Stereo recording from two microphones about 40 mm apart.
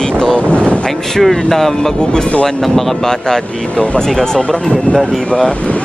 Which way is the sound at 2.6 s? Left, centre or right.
Centre.